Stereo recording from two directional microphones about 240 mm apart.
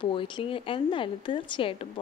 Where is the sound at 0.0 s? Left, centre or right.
Left.